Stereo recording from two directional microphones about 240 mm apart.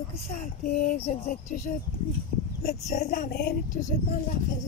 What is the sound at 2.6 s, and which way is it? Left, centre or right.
Speech, left.